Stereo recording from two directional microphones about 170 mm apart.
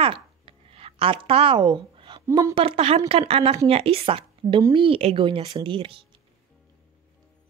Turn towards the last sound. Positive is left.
turn(degrees=-30)  # may be behind; listen again after turning